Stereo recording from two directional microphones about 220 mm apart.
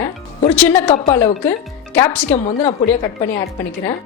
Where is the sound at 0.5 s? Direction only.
5° left (ahead or behind).